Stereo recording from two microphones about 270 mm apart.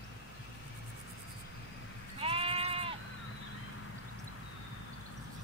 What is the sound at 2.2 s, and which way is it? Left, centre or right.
Sheep, right.